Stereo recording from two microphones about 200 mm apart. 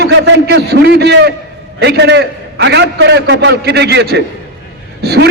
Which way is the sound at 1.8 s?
60° right (ahead or behind).